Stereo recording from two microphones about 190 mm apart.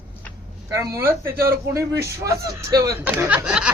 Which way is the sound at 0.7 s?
15° right (ahead or behind).